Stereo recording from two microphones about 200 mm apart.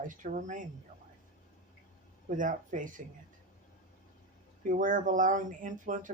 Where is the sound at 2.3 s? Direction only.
40° right (ahead or behind).